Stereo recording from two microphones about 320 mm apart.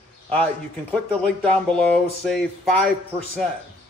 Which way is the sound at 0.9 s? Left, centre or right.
Centre.